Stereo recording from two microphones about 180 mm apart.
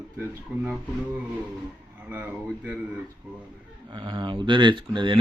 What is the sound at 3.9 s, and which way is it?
Speech, 25° right (ahead or behind).